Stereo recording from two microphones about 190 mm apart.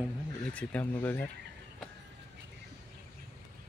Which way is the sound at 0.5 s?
5° left (ahead or behind).